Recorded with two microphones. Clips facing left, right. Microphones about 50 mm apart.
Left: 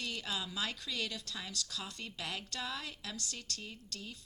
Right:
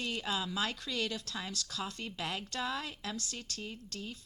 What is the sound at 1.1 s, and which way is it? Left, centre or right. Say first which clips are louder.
A woman's voice: right 4 dB; right.